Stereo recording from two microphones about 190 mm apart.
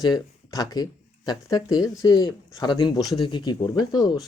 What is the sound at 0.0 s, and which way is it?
Speech, 20° left (ahead or behind).